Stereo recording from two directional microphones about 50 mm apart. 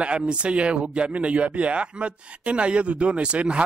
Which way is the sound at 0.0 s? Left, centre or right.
Right.